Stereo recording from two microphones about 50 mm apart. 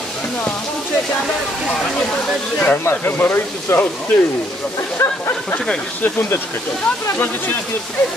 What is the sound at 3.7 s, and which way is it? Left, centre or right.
Speech, left.